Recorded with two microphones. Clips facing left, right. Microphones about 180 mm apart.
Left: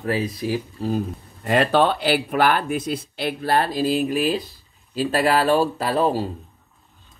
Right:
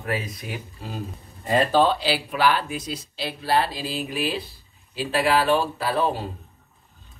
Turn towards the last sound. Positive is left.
turn(degrees=40)  # may be behind; listen again after turning